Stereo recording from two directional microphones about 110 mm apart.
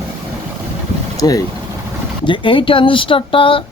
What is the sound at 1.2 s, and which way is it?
Speech, 30° left (ahead or behind).